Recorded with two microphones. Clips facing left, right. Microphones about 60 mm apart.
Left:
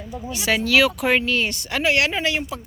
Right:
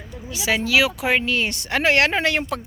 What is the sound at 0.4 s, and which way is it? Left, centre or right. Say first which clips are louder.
Speech: left 1 dB; centre.